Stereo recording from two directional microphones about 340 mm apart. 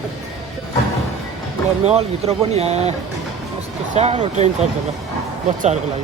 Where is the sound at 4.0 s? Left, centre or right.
Centre.